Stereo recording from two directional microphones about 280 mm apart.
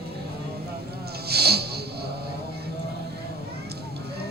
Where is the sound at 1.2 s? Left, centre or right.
Right.